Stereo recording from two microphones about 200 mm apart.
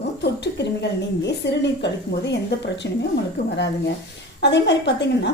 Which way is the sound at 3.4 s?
60° left (ahead or behind).